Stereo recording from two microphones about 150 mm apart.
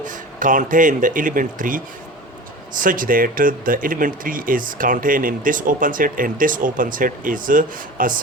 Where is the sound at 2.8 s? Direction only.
65° right (ahead or behind).